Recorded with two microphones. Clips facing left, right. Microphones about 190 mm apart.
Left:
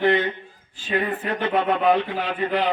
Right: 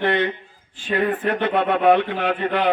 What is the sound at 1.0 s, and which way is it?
Speech, 60° right (ahead or behind).